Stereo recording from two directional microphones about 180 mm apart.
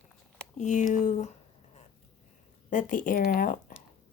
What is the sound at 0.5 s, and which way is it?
Speech, 40° left (ahead or behind).